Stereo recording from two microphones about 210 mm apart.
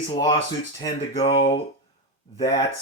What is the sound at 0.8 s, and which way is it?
Speech, 25° left (ahead or behind).